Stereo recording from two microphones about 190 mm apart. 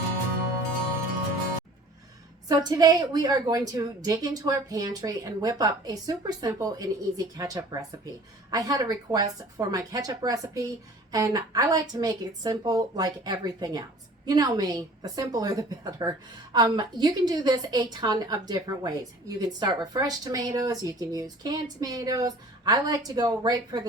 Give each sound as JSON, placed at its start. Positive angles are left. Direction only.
{"t": 2.5, "sound": "a woman's voice", "side_deg": -20}